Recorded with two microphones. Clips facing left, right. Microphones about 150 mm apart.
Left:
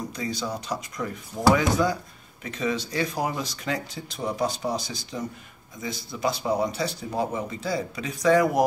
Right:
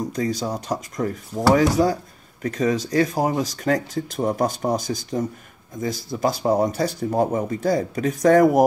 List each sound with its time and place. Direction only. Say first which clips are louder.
0.1 s speech: right 6 dB; 45° right (ahead or behind)